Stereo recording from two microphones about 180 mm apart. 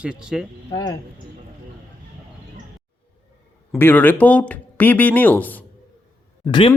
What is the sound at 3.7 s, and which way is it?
Speech, 10° left (ahead or behind).